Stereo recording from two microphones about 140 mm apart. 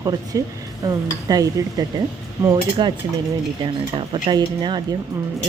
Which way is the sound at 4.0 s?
35° right (ahead or behind).